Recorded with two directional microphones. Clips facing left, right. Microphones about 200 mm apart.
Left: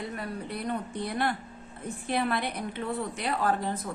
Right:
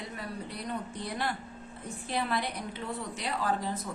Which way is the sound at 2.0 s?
55° left (ahead or behind).